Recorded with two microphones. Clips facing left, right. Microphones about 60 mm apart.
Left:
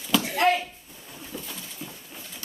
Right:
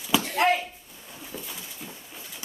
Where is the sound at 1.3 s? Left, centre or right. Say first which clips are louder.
Left 1 dB; centre.